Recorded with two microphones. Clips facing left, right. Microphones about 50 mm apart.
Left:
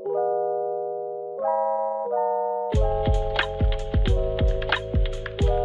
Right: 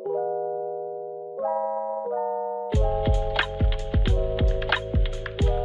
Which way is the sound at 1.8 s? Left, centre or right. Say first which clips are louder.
Left 3 dB; left.